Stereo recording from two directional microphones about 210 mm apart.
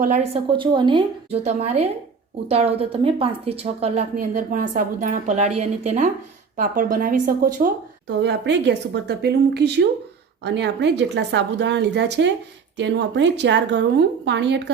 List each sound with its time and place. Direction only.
0.0 s a woman's voice: 35° right (ahead or behind)
8.2 s a woman's voice: 55° right (ahead or behind)